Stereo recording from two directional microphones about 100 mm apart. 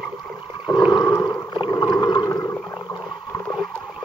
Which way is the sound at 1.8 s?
45° left (ahead or behind).